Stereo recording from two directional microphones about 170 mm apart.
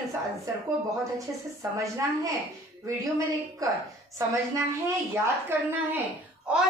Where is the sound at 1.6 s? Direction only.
20° right (ahead or behind).